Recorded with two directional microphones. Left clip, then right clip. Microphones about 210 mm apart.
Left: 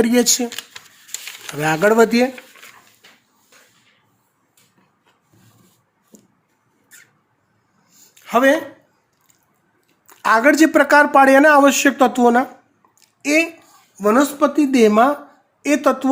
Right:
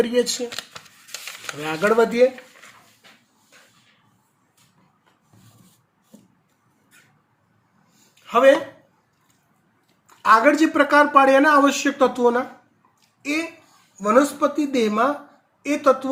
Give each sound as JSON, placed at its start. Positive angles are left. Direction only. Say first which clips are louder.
{"t": 0.0, "sound": "speech", "louder": "left 4 dB", "side_deg": 55}
{"t": 1.6, "sound": "speech", "louder": "left 5 dB", "side_deg": 60}
{"t": 8.2, "sound": "speech", "louder": "even", "side_deg": 55}
{"t": 10.2, "sound": "speech", "louder": "left 2 dB", "side_deg": 60}
{"t": 14.0, "sound": "a woman's voice", "louder": "left 2 dB", "side_deg": 50}